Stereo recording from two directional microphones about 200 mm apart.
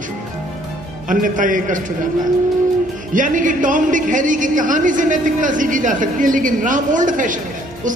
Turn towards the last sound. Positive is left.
turn(degrees=-40)  # may be behind; listen again after turning